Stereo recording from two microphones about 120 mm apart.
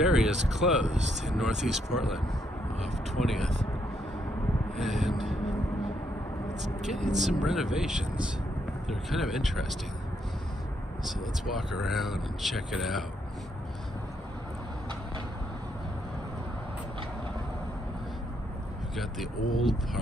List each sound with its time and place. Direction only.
0.0 s a sound: 5° right (ahead or behind)
0.3 s speech: 70° right (ahead or behind)
1.2 s speech: centre (ahead or behind)
4.7 s a sound: centre (ahead or behind)
6.9 s speech: centre (ahead or behind)
11.8 s speech: centre (ahead or behind)
18.9 s speech: centre (ahead or behind)